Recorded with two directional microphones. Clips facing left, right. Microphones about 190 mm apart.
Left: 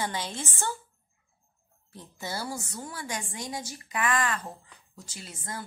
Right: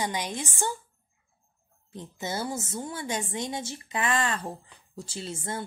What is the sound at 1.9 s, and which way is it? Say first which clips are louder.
A woman's voice: right 3 dB; 20° right (ahead or behind).